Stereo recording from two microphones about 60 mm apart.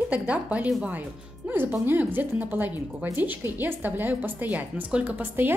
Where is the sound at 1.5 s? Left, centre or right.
Right.